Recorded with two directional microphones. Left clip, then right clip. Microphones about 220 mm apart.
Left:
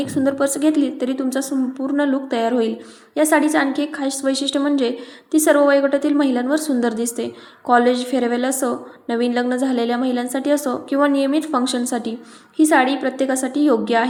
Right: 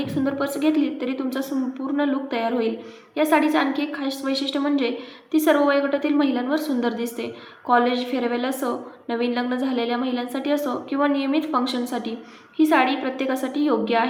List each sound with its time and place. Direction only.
0.0 s a woman's voice: 35° left (ahead or behind)